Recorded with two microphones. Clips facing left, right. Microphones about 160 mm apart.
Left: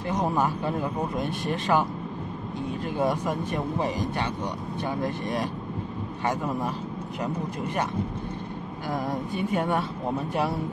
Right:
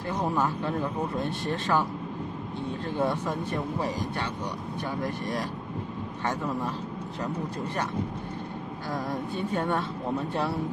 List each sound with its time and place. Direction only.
0.1 s speech: 15° left (ahead or behind)
4.8 s speech: 20° left (ahead or behind)
8.9 s speech: 15° left (ahead or behind)